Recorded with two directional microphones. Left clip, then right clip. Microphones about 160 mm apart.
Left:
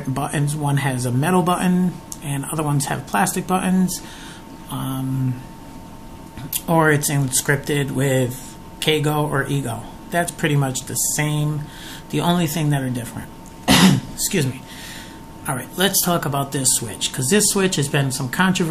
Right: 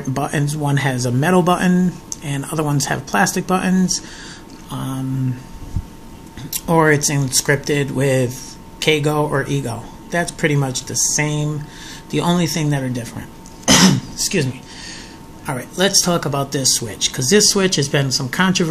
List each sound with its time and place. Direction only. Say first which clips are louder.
0.1 s speech: right 3 dB; 25° right (ahead or behind)
6.7 s speech: right 3 dB; 15° right (ahead or behind)
15.4 s speech: right 2 dB; 15° right (ahead or behind)